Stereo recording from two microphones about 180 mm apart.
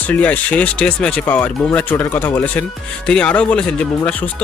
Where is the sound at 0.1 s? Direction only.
10° left (ahead or behind).